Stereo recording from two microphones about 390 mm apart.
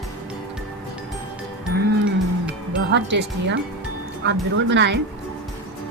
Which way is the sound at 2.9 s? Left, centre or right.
Right.